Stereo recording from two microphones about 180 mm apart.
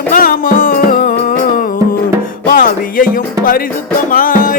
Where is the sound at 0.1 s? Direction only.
55° left (ahead or behind).